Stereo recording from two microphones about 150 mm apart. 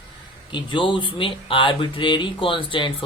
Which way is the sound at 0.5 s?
35° left (ahead or behind).